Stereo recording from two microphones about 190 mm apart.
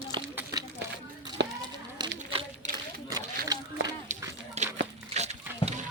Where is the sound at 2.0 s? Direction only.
20° right (ahead or behind).